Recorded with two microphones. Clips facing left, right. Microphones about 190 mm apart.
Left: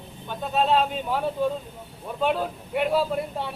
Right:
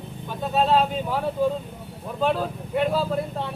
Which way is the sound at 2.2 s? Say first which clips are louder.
Right 1 dB; 5° left (ahead or behind).